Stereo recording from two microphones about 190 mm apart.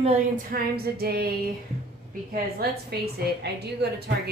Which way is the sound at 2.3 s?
55° right (ahead or behind).